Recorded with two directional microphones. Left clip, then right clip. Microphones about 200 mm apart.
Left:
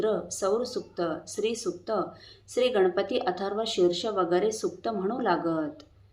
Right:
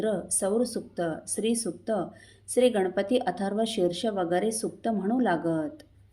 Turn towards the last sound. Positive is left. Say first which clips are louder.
# even
turn(degrees=-45)  # may be behind; listen again after turning